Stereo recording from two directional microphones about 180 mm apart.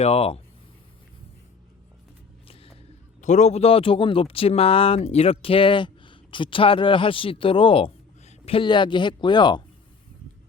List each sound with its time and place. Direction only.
0.0 s speech: 35° left (ahead or behind)
2.5 s music: 30° left (ahead or behind)
3.2 s speech: 40° left (ahead or behind); by 9.6 s 25° left (ahead or behind)